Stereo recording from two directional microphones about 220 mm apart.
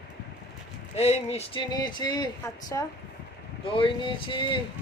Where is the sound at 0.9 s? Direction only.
30° left (ahead or behind).